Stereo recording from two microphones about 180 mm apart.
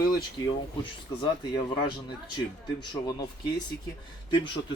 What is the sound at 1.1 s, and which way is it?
Speech, 20° left (ahead or behind).